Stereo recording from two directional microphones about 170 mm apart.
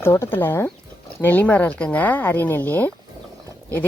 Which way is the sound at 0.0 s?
15° left (ahead or behind).